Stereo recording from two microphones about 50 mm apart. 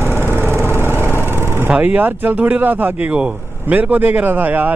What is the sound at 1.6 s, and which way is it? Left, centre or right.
Speech, right.